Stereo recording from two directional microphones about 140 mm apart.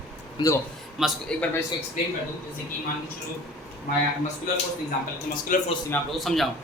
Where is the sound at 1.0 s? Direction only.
5° right (ahead or behind).